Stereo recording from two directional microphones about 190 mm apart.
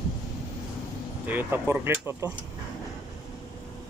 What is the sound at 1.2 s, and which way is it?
Speech, 10° right (ahead or behind).